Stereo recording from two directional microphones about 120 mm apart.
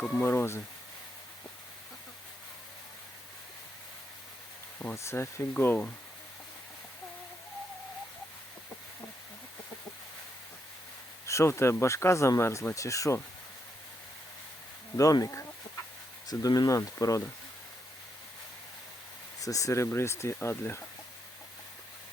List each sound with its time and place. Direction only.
0.0 s speech: 5° left (ahead or behind)
0.3 s speech: 20° left (ahead or behind)
4.9 s speech: 20° left (ahead or behind)
11.3 s speech: 25° left (ahead or behind)
14.9 s speech: 30° left (ahead or behind)
19.4 s speech: 25° left (ahead or behind)